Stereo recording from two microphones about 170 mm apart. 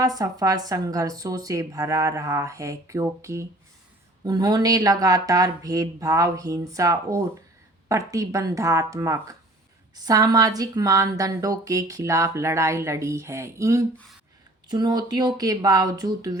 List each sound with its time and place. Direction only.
0.0 s a woman's voice: 20° right (ahead or behind)